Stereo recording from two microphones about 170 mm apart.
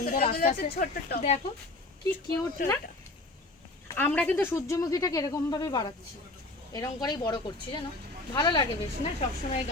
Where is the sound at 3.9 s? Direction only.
10° left (ahead or behind).